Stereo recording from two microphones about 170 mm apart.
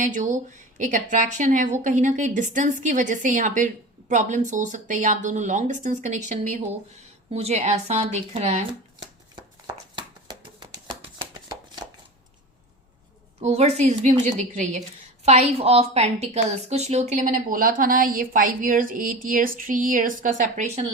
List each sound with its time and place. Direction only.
0.0 s a woman's voice: 45° right (ahead or behind)
7.3 s speech: 35° right (ahead or behind)
10.2 s a sound: 25° right (ahead or behind)
13.4 s a woman's voice: 40° right (ahead or behind)